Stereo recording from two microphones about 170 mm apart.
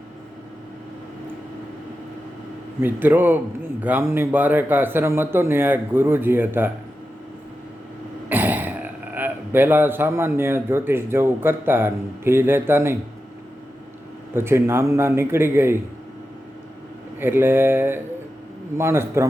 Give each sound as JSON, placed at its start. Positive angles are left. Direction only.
{"t": 2.8, "sound": "a man's voice", "side_deg": -10}
{"t": 8.3, "sound": "throat clearing", "side_deg": -10}
{"t": 9.1, "sound": "a man's voice", "side_deg": -10}
{"t": 14.3, "sound": "a man's voice", "side_deg": -15}
{"t": 17.2, "sound": "a man's voice", "side_deg": -10}